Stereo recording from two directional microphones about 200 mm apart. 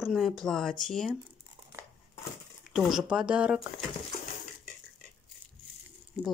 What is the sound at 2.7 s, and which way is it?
Speech, 5° right (ahead or behind).